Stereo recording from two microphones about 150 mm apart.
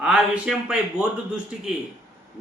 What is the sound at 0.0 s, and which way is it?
A man's voice, 5° right (ahead or behind).